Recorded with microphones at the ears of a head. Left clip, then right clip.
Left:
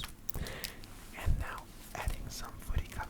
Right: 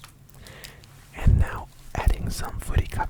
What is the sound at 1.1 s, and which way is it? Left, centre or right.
Whispering, right.